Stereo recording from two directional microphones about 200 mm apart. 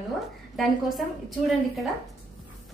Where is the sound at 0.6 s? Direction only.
Centre (ahead or behind).